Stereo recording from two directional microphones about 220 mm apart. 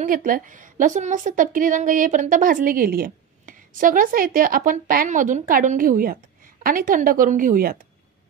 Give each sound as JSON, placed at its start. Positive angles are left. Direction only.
{"t": 0.0, "sound": "a woman's voice", "side_deg": -40}